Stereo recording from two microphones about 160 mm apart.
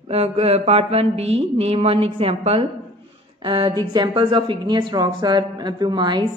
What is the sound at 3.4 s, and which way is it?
A woman's voice, 30° right (ahead or behind).